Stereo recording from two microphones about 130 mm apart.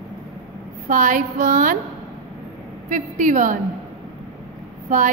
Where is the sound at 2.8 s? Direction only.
75° right (ahead or behind).